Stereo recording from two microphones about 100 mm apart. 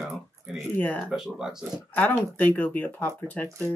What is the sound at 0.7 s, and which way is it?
Speech, 15° left (ahead or behind).